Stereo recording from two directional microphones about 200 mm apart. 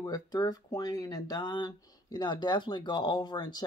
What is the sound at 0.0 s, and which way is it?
Speech, 20° left (ahead or behind).